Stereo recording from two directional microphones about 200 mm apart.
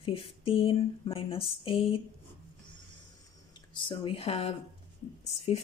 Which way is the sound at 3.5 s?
25° left (ahead or behind).